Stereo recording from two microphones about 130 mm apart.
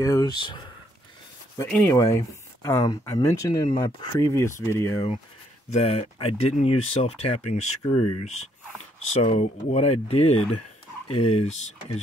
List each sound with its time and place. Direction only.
0.0 s speech: 30° left (ahead or behind)
1.7 s speech: 10° left (ahead or behind)
2.0 s speech: 25° left (ahead or behind)
5.7 s speech: 55° left (ahead or behind)